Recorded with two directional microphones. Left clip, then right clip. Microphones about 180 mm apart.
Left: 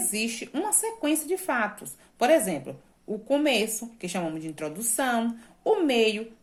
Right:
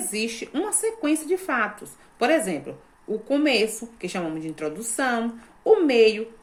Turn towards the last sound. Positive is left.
turn(degrees=45)  # may be behind; listen again after turning